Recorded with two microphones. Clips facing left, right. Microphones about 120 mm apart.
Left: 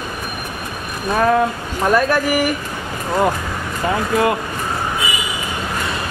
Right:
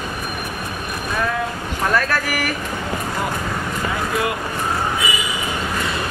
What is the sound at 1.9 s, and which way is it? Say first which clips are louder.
Speech: left 7 dB; 15° left (ahead or behind).